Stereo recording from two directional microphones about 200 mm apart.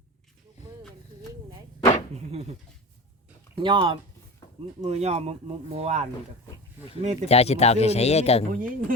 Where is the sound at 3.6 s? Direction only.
25° right (ahead or behind).